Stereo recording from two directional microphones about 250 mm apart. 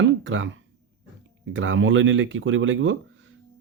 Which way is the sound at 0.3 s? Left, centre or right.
Right.